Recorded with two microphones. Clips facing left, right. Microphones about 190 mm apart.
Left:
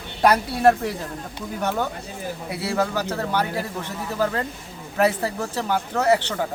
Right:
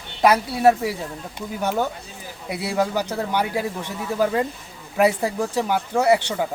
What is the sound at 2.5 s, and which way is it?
Speech, 15° right (ahead or behind).